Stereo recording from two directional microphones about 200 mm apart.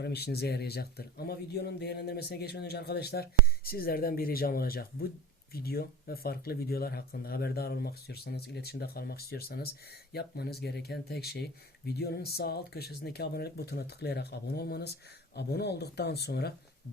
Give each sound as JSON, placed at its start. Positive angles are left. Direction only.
{"t": 0.0, "sound": "speech", "side_deg": 55}